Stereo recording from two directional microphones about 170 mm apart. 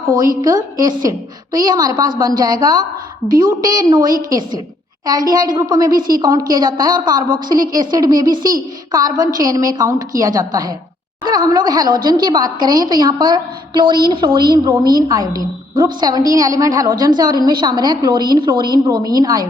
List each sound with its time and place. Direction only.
0.4 s a woman's voice: 20° right (ahead or behind)
3.2 s a woman's voice: 55° right (ahead or behind)
3.8 s a woman's voice: 25° right (ahead or behind)